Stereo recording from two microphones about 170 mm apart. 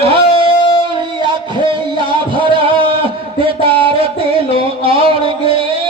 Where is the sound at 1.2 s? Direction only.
30° right (ahead or behind).